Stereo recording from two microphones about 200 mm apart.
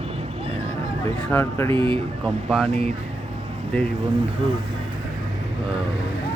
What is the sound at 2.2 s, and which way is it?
Speech, centre (ahead or behind).